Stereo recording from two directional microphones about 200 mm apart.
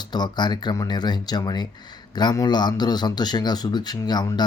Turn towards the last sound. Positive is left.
turn(degrees=20)  # may be behind; listen again after turning